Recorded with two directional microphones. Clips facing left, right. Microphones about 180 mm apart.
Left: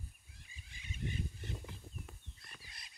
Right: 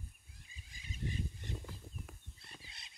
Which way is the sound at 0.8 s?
35° right (ahead or behind).